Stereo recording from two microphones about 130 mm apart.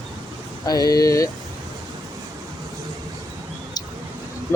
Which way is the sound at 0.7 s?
30° left (ahead or behind).